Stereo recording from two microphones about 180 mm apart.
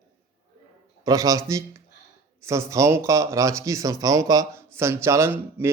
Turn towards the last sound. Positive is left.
turn(degrees=-15)  # may be behind; listen again after turning